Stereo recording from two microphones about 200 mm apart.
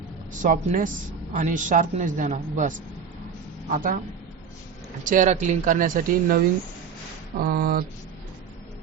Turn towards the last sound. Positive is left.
turn(degrees=-45)  # may be behind; listen again after turning